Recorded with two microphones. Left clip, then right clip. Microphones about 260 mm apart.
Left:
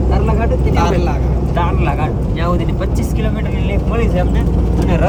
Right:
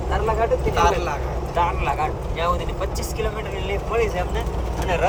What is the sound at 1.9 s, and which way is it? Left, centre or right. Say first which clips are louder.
Vehicle: left 3 dB; left.